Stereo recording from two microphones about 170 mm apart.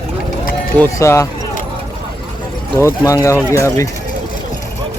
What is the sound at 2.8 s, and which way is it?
Speech, 20° left (ahead or behind).